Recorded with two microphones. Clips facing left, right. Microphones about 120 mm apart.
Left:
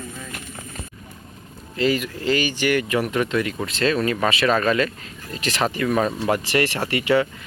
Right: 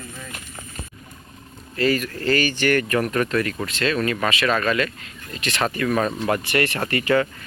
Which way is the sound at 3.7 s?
30° left (ahead or behind).